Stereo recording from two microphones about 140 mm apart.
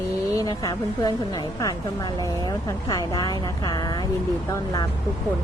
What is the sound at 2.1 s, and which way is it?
Speech, 30° right (ahead or behind).